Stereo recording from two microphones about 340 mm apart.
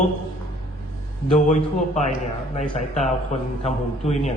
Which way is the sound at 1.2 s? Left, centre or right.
Centre.